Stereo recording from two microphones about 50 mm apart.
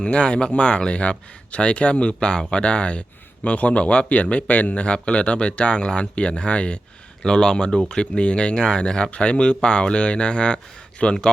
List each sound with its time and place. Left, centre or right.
0.0 s speech: left